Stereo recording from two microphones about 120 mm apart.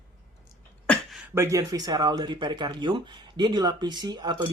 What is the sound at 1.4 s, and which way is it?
Speech, 25° right (ahead or behind).